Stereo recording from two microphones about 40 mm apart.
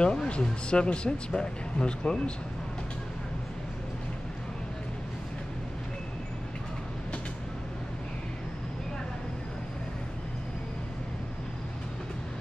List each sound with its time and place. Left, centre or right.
0.0 s speech: left